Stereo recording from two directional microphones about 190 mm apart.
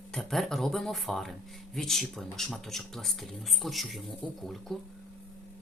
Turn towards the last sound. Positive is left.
turn(degrees=0)  # may be behind; listen again after turning